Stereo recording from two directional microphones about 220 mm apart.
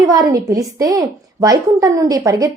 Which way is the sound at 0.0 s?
15° right (ahead or behind).